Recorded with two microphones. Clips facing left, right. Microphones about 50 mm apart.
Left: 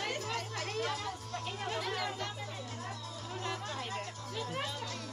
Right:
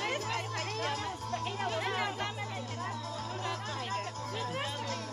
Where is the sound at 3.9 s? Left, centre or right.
Right.